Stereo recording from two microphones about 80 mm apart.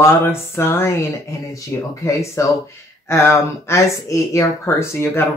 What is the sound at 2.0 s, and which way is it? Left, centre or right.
Speech, left.